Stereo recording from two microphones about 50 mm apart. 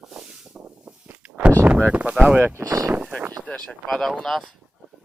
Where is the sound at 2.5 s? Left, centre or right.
Right.